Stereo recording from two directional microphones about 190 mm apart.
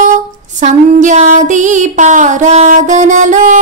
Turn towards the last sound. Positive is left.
turn(degrees=-40)  # may be behind; listen again after turning